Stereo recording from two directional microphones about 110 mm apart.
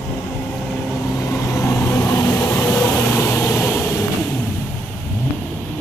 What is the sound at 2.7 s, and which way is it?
Vehicle, 15° left (ahead or behind).